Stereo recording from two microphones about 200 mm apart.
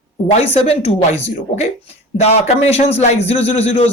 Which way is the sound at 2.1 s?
30° left (ahead or behind).